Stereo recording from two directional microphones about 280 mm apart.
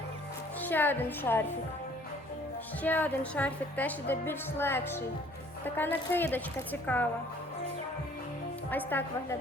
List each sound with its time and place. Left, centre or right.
0.6 s speech: centre
2.8 s a woman's voice: centre
8.7 s speech: centre